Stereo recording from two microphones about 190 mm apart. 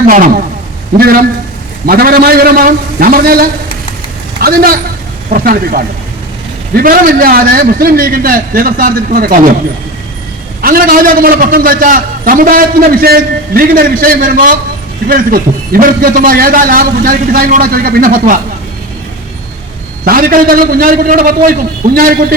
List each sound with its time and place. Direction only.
0.1 s a man's voice: 45° right (ahead or behind)
10.6 s a man's voice: 50° right (ahead or behind)
20.1 s a man's voice: 50° right (ahead or behind)